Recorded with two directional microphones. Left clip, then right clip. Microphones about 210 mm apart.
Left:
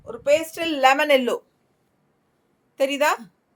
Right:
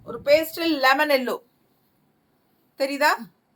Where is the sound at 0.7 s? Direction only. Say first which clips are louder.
Left 2 dB; 30° left (ahead or behind).